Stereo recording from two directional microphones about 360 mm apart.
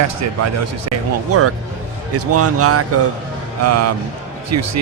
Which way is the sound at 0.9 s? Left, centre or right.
Right.